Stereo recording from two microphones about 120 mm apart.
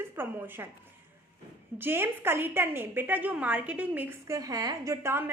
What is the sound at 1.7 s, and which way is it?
A woman's voice, 20° right (ahead or behind).